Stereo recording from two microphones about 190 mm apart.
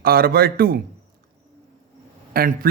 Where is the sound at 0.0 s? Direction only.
50° right (ahead or behind).